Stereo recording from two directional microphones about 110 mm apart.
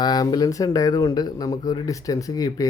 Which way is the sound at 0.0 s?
40° left (ahead or behind).